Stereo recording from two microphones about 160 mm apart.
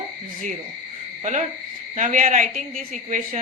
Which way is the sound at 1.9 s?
50° right (ahead or behind).